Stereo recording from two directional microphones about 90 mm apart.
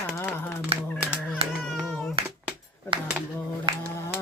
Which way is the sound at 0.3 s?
20° left (ahead or behind).